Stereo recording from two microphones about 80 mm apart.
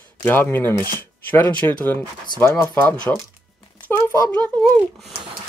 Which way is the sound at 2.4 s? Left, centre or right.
Left.